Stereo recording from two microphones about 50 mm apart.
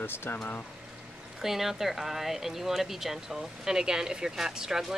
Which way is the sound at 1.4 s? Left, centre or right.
Centre.